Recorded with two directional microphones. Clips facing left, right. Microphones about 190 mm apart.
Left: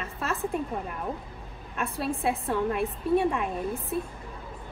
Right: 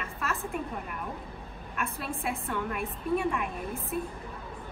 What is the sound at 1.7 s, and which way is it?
A woman's voice, 35° left (ahead or behind).